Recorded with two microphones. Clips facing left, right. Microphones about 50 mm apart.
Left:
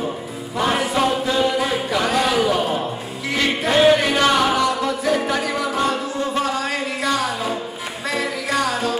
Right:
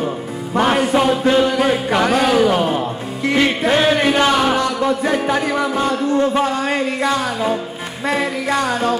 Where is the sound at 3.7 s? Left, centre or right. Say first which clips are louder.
Left 3 dB; right.